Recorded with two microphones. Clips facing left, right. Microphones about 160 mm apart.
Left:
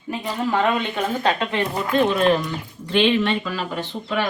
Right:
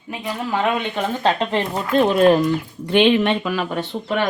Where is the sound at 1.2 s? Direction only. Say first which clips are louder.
Right 4 dB; 35° right (ahead or behind).